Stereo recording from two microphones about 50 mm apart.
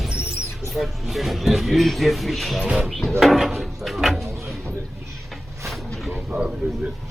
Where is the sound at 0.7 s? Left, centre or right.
Centre.